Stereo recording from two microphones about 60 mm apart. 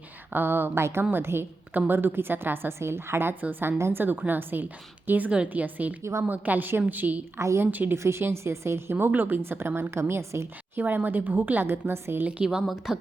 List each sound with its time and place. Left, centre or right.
0.3 s a woman's voice: right
6.0 s a woman's voice: right
6.2 s a woman's voice: right
7.3 s a woman's voice: right
7.7 s a woman's voice: right
7.9 s a woman's voice: right
10.8 s a woman's voice: right
12.3 s a woman's voice: centre